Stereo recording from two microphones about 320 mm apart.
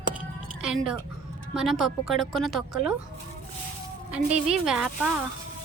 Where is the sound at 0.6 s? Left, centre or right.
Centre.